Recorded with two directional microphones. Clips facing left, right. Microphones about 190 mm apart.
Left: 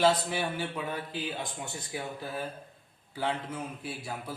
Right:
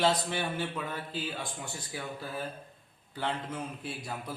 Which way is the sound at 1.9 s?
20° left (ahead or behind).